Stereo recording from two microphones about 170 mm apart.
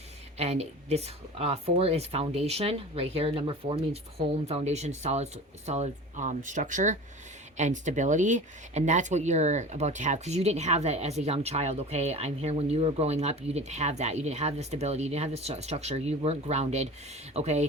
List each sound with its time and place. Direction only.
0.3 s speech: 40° right (ahead or behind)